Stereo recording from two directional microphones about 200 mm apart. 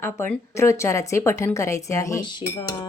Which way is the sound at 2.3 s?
20° left (ahead or behind).